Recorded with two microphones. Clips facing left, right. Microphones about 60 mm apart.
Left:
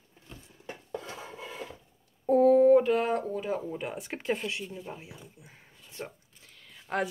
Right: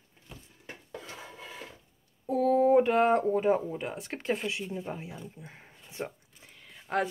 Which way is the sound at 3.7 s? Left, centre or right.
Centre.